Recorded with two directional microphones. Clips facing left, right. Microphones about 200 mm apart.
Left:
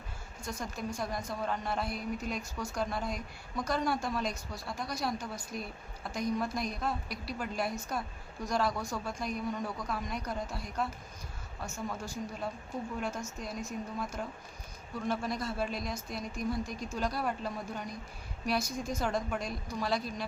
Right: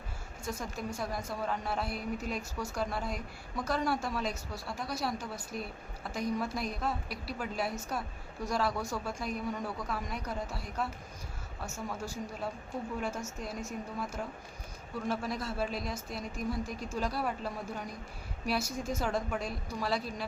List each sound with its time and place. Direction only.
0.4 s a woman's voice: 5° right (ahead or behind)
11.6 s a man's voice: 5° right (ahead or behind)